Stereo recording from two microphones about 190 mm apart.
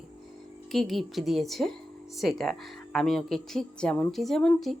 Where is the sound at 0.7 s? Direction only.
Centre (ahead or behind).